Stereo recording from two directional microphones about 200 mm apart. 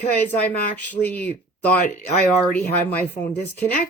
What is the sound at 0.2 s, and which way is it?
Speech, 10° left (ahead or behind).